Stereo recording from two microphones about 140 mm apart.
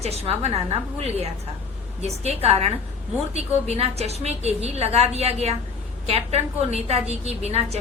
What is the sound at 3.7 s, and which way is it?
A woman's voice, 50° right (ahead or behind).